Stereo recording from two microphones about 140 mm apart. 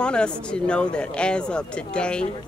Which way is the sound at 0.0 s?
5° left (ahead or behind).